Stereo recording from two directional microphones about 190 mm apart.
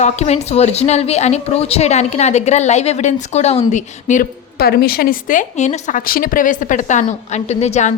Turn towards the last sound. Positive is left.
turn(degrees=35)  # may be behind; listen again after turning